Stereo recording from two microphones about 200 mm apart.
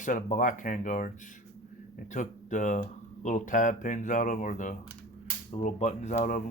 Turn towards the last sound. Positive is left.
turn(degrees=40)  # may be behind; listen again after turning